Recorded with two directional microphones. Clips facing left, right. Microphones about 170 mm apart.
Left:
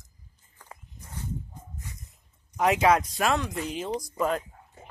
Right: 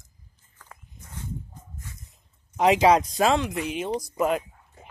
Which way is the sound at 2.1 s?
20° right (ahead or behind).